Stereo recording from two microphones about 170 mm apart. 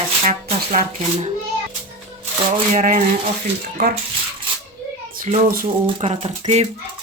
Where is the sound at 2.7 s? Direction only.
50° right (ahead or behind).